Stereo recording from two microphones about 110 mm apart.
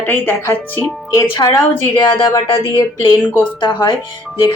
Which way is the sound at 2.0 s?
40° left (ahead or behind).